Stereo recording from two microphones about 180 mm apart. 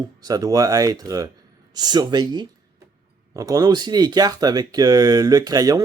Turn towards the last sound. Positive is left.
turn(degrees=-20)  # may be behind; listen again after turning